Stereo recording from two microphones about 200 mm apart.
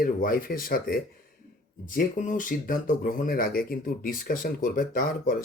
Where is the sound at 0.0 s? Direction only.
45° left (ahead or behind).